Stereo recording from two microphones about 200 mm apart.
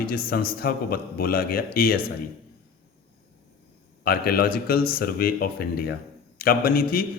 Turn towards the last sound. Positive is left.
turn(degrees=50)  # may be behind; listen again after turning